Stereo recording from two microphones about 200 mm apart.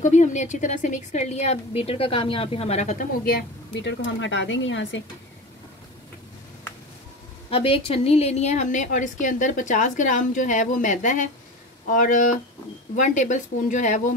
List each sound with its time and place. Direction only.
0.0 s a woman's voice: 35° left (ahead or behind)
3.3 s speech: 55° left (ahead or behind)
7.4 s a woman's voice: 30° left (ahead or behind)